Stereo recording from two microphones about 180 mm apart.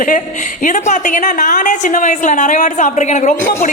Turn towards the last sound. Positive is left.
turn(degrees=40)  # may be behind; listen again after turning